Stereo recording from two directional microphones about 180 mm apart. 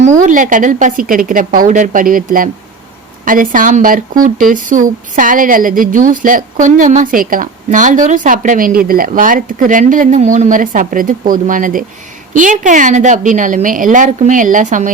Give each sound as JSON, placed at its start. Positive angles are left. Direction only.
{"t": 0.0, "sound": "speech", "side_deg": -45}